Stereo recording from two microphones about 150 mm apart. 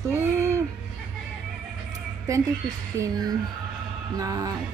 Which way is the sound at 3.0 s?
25° right (ahead or behind).